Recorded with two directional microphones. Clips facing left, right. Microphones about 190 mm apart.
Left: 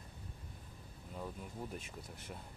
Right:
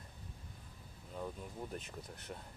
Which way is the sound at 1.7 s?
Centre (ahead or behind).